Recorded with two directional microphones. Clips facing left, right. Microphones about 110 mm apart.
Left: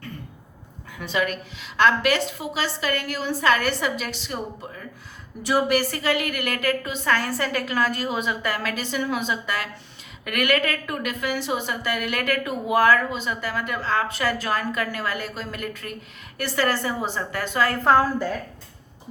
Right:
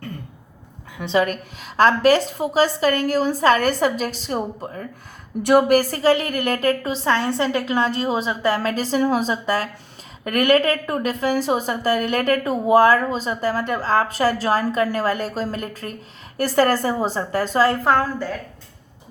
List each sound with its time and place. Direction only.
0.9 s a woman's voice: 25° right (ahead or behind)
1.2 s a woman's voice: 45° right (ahead or behind)
5.4 s a woman's voice: 55° right (ahead or behind); by 17.7 s 35° right (ahead or behind)
17.8 s a woman's voice: 5° left (ahead or behind)